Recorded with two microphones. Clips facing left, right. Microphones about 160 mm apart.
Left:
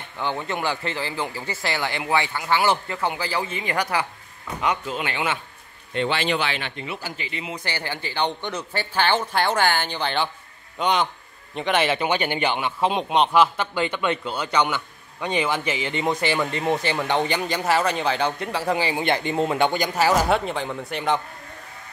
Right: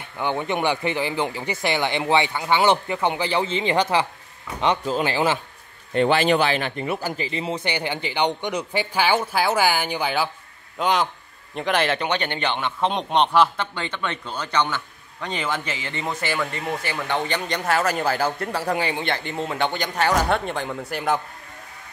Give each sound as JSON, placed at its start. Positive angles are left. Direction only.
{"t": 0.2, "sound": "speech", "side_deg": -20}
{"t": 5.9, "sound": "speech", "side_deg": -45}
{"t": 7.6, "sound": "speech", "side_deg": -20}
{"t": 17.3, "sound": "speech", "side_deg": 5}
{"t": 19.0, "sound": "speech", "side_deg": 15}
{"t": 19.7, "sound": "speech", "side_deg": 10}